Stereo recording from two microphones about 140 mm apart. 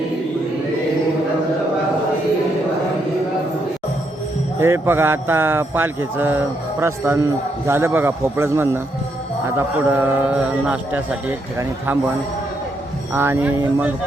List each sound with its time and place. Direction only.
4.6 s speech: 15° right (ahead or behind)
13.1 s speech: 15° right (ahead or behind)